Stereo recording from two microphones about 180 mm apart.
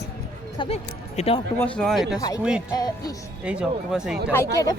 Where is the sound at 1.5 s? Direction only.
5° left (ahead or behind).